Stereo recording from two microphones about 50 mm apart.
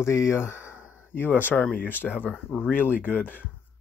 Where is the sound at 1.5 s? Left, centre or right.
Left.